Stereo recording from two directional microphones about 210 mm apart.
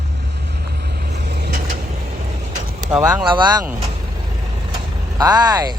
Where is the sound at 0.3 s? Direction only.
50° right (ahead or behind); by 2.7 s 35° right (ahead or behind).